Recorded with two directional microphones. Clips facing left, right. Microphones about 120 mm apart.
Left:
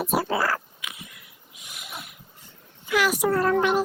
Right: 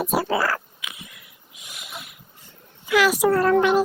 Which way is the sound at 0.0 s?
90° right.